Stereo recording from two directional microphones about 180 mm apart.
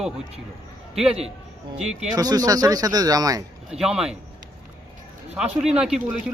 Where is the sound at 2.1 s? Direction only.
20° right (ahead or behind).